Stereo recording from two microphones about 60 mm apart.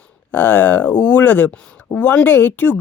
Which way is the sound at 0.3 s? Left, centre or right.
Left.